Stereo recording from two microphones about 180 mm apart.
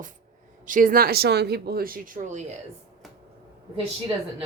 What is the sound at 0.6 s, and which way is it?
Speech, 50° right (ahead or behind).